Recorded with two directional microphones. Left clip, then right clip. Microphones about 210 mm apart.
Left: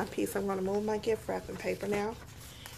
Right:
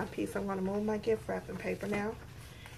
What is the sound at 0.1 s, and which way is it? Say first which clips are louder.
Speech: left 3 dB; 50° left (ahead or behind).